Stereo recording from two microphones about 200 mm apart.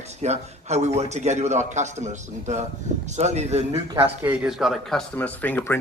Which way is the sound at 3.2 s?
35° right (ahead or behind).